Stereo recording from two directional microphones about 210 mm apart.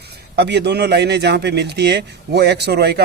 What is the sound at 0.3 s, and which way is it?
Speech, 50° right (ahead or behind).